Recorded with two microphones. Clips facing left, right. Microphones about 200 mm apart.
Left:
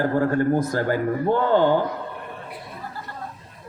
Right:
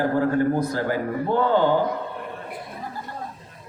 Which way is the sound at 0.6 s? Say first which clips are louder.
Left 1 dB; 45° left (ahead or behind).